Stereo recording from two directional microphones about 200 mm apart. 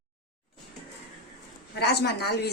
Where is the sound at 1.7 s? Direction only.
55° left (ahead or behind).